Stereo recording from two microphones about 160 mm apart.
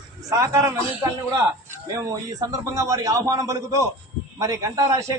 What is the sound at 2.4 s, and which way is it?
A man's voice, 20° right (ahead or behind).